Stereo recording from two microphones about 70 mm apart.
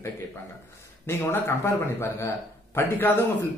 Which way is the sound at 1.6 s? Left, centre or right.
Left.